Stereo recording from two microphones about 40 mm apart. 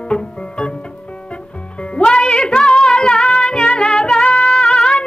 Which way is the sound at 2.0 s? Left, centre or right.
Left.